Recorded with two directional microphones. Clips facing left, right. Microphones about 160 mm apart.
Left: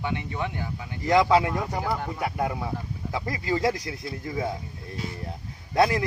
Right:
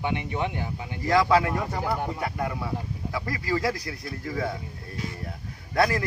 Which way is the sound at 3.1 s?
20° left (ahead or behind).